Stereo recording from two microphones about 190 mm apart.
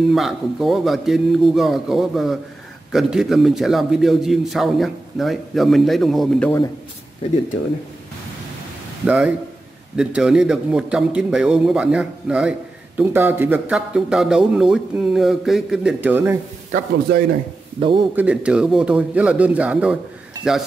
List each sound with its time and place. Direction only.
0.1 s a man's voice: centre (ahead or behind)
7.2 s speech: 30° left (ahead or behind)
9.0 s a man's voice: 10° right (ahead or behind)
17.7 s a man's voice: 25° right (ahead or behind)
18.1 s a man's voice: 5° right (ahead or behind)